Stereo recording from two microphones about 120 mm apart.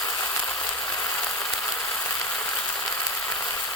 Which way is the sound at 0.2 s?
10° left (ahead or behind).